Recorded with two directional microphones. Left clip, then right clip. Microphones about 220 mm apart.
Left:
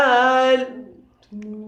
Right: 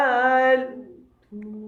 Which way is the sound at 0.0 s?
15° left (ahead or behind).